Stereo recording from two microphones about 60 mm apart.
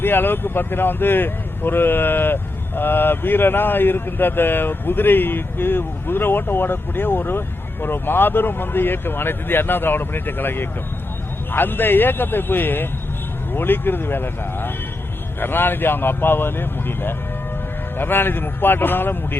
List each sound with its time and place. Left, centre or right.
0.0 s speech: left